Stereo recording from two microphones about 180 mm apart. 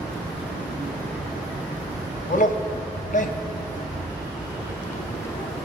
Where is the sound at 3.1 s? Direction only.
45° left (ahead or behind).